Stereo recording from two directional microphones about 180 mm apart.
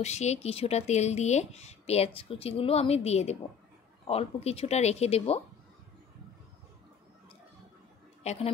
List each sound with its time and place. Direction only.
0.0 s speech: 40° left (ahead or behind)
8.2 s a woman's voice: 35° left (ahead or behind)